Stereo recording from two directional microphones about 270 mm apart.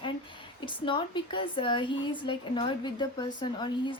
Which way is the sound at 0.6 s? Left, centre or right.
Centre.